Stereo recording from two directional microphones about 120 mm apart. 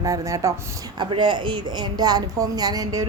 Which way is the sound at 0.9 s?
40° right (ahead or behind).